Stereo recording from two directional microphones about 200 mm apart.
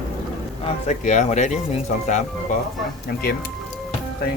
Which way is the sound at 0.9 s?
35° left (ahead or behind).